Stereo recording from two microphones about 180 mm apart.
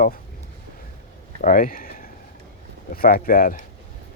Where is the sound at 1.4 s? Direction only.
50° left (ahead or behind).